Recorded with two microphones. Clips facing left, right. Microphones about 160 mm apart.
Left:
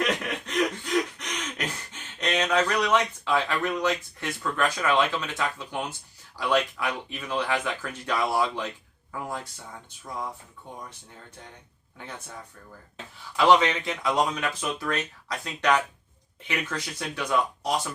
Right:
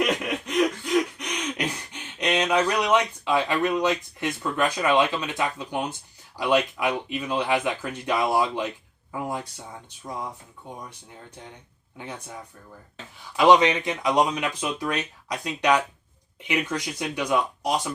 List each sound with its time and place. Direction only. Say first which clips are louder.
0.0 s a sound: right 3 dB; 10° right (ahead or behind)
6.3 s speech: right 3 dB; 15° right (ahead or behind)
11.9 s speech: right 3 dB; 15° right (ahead or behind)